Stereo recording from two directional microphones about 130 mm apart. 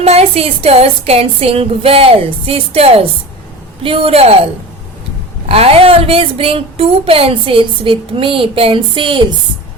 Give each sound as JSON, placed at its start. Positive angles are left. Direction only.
{"t": 0.0, "sound": "speech", "side_deg": -50}
{"t": 5.5, "sound": "speech", "side_deg": -50}